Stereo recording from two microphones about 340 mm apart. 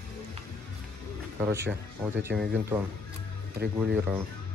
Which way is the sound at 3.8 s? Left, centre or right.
Centre.